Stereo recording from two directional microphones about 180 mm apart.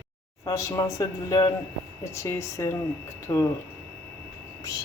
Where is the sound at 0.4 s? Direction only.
20° left (ahead or behind).